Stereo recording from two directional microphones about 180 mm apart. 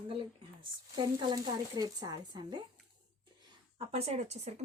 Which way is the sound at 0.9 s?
25° right (ahead or behind).